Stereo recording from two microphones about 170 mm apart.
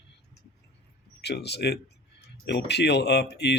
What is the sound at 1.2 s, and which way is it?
Speech, 80° left.